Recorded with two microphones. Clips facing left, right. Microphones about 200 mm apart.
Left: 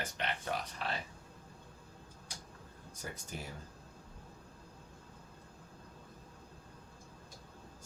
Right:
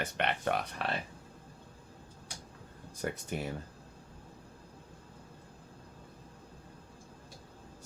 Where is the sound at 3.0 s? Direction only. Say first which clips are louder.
Right 9 dB; 65° right (ahead or behind).